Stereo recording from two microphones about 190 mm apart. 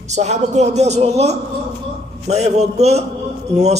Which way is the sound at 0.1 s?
35° right (ahead or behind).